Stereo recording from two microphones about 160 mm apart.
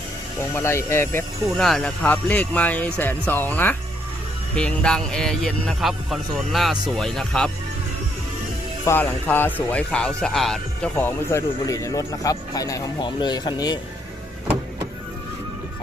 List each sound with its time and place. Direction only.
0.5 s speech: 15° left (ahead or behind)
1.5 s speech: centre (ahead or behind)
8.9 s speech: 10° left (ahead or behind)
10.9 s speech: 15° left (ahead or behind)